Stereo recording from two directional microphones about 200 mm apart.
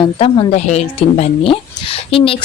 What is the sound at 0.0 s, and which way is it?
Speech, 30° left (ahead or behind).